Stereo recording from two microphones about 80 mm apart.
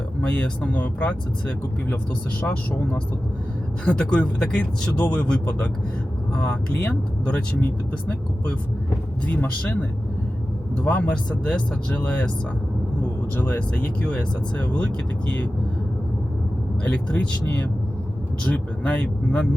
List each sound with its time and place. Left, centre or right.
0.2 s speech: centre
3.8 s speech: centre
6.8 s speech: centre
9.2 s speech: left
10.8 s speech: centre
13.3 s speech: left
16.8 s speech: left